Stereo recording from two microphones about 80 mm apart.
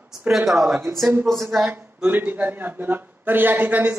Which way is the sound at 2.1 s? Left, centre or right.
Right.